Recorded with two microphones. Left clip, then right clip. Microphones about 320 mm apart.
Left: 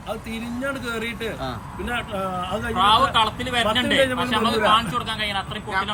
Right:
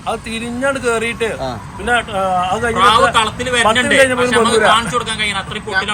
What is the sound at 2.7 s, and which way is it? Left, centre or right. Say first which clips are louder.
Speech: right 6 dB; centre.